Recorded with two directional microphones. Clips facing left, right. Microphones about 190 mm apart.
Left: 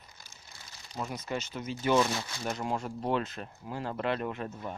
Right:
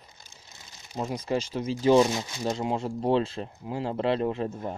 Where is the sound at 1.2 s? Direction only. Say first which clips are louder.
Right 7 dB; 30° right (ahead or behind).